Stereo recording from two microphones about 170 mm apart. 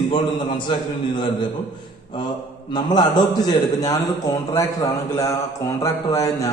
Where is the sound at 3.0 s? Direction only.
25° left (ahead or behind).